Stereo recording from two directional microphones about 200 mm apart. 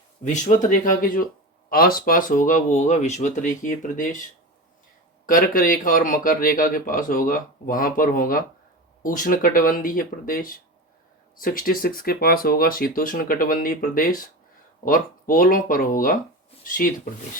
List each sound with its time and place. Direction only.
0.2 s speech: 40° left (ahead or behind)
5.3 s speech: 45° left (ahead or behind)